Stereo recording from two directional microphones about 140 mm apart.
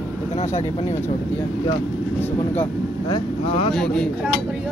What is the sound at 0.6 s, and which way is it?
Speech, 50° left (ahead or behind).